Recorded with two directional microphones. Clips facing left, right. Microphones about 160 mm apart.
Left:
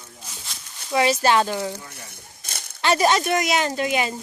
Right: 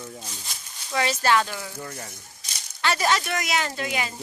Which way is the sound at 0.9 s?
20° left (ahead or behind).